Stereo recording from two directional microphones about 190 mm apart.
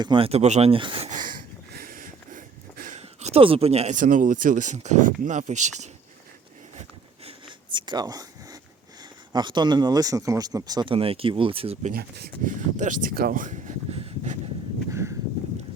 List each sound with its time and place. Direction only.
0.0 s speech: 25° right (ahead or behind)
1.1 s a sound: 45° right (ahead or behind)
3.0 s speech: 35° right (ahead or behind)
7.3 s zipper: 25° right (ahead or behind)
9.3 s speech: 25° right (ahead or behind)
11.9 s speech: 55° right (ahead or behind)
12.7 s speech: 40° right (ahead or behind)
14.8 s a sound: 15° right (ahead or behind)